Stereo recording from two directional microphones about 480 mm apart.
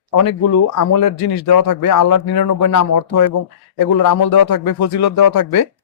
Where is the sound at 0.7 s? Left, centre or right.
Left.